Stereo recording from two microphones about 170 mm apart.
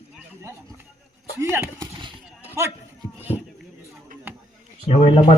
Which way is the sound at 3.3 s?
25° left (ahead or behind).